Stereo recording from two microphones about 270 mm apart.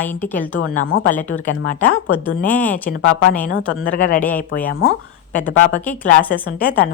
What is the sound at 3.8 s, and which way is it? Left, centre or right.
Speech, left.